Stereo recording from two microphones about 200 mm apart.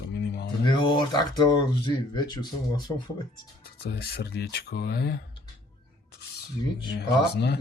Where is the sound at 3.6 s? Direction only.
55° left (ahead or behind).